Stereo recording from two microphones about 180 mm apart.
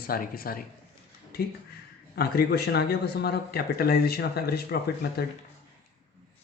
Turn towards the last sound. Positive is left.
turn(degrees=60)  # may be behind; listen again after turning